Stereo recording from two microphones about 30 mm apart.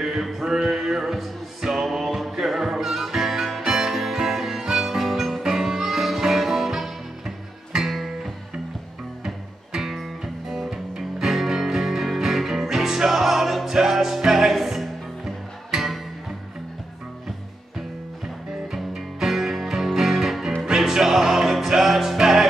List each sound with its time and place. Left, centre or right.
0.0 s a sound: centre
0.7 s music: centre
7.7 s music: right
9.2 s music: right
9.8 s music: centre
15.7 s music: centre
19.1 s music: centre